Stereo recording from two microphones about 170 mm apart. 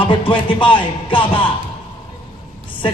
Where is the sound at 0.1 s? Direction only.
30° left (ahead or behind).